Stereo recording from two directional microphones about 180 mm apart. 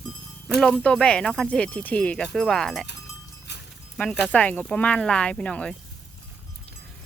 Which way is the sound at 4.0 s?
Centre (ahead or behind).